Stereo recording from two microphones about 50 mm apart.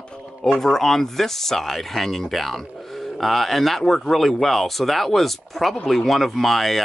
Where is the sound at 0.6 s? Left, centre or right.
Centre.